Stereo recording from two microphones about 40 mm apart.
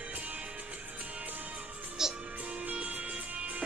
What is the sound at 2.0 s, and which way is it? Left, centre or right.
Music, centre.